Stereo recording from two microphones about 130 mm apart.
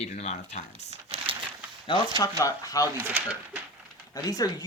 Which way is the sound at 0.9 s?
50° right (ahead or behind).